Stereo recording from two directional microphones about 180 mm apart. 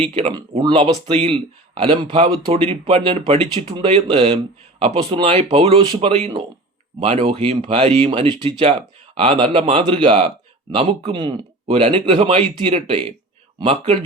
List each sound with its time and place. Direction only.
0.0 s speech: 35° right (ahead or behind)